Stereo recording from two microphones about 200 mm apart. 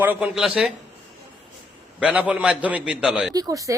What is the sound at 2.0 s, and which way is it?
A man's voice, 5° right (ahead or behind).